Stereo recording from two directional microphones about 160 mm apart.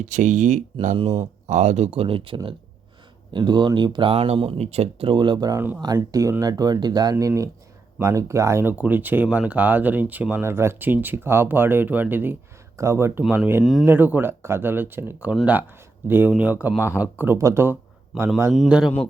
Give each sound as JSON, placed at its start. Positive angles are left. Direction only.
{"t": 0.0, "sound": "speech", "side_deg": -50}
{"t": 0.9, "sound": "speech", "side_deg": -35}
{"t": 1.5, "sound": "speech", "side_deg": -45}
{"t": 18.5, "sound": "a man's voice", "side_deg": 0}